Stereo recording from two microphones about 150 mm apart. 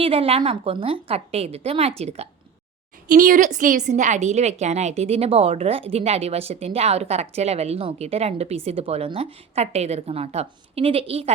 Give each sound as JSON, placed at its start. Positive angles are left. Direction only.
{"t": 0.0, "sound": "a woman's voice", "side_deg": -40}
{"t": 3.1, "sound": "a woman's voice", "side_deg": -60}